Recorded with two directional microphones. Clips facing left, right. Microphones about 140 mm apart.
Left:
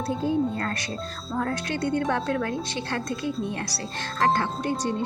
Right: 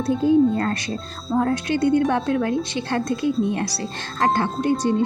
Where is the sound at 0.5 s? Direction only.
25° right (ahead or behind).